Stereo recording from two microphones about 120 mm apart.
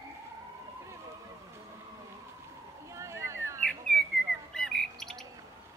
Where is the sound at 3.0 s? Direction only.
25° right (ahead or behind).